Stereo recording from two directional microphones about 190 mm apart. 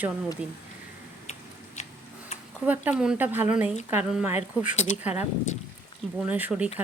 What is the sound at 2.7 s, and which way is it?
Speech, 5° right (ahead or behind).